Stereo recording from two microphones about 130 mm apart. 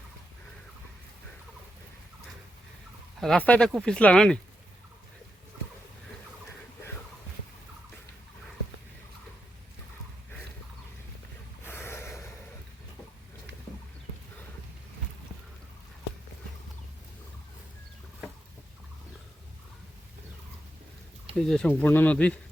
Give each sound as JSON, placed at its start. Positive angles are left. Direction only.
{"t": 3.2, "sound": "speech", "side_deg": 5}
{"t": 11.6, "sound": "snort", "side_deg": 20}
{"t": 21.3, "sound": "speech", "side_deg": 5}
{"t": 21.7, "sound": "speech", "side_deg": 15}